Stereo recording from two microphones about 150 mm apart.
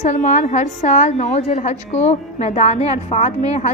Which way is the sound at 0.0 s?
50° left (ahead or behind).